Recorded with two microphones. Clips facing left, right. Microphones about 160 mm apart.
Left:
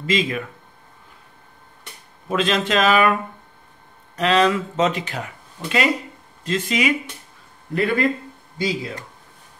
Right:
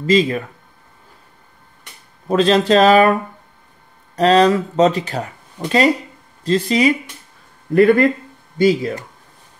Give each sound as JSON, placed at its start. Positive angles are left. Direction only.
{"t": 0.0, "sound": "speech", "side_deg": -40}
{"t": 2.2, "sound": "speech", "side_deg": -35}
{"t": 4.2, "sound": "speech", "side_deg": -40}